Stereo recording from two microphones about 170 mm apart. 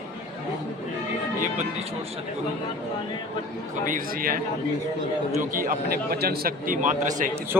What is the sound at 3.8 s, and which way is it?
Speech, 55° right (ahead or behind).